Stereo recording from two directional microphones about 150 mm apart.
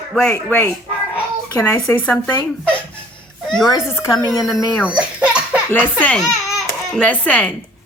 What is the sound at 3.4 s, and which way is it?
Speech, 5° left (ahead or behind).